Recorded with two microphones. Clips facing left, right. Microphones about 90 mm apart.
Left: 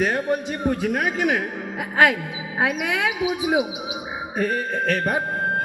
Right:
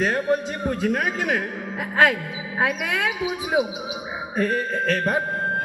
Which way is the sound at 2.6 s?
15° left (ahead or behind).